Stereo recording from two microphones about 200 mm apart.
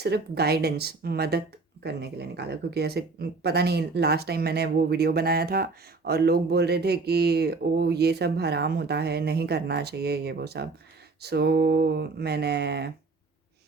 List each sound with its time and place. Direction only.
0.0 s speech: 55° right (ahead or behind)